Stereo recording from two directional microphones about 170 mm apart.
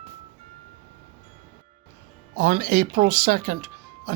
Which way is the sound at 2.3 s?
60° right (ahead or behind).